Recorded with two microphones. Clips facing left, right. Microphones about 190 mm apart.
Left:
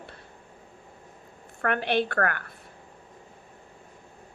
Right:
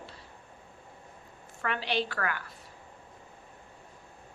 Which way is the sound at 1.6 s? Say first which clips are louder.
Left 6 dB; 55° left (ahead or behind).